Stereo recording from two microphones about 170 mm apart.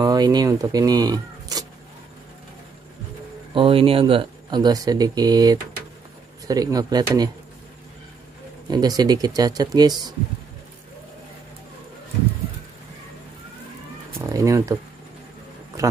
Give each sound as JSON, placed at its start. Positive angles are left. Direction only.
{"t": 0.0, "sound": "speech", "side_deg": -25}
{"t": 3.5, "sound": "speech", "side_deg": -30}
{"t": 8.6, "sound": "speech", "side_deg": -25}
{"t": 14.1, "sound": "a sound", "side_deg": -20}